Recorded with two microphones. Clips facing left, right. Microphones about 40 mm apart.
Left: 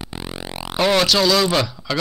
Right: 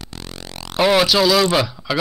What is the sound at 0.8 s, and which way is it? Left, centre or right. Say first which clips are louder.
Speech: right 2 dB; centre.